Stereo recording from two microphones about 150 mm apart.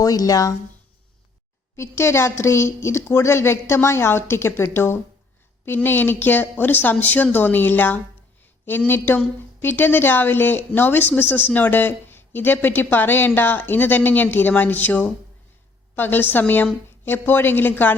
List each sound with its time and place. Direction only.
0.0 s speech: 25° left (ahead or behind)
1.7 s a woman's voice: 15° left (ahead or behind)